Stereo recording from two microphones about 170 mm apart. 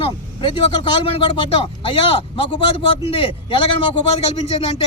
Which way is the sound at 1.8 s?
30° left (ahead or behind).